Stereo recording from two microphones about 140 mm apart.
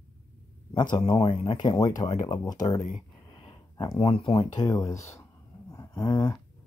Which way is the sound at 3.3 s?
35° left (ahead or behind).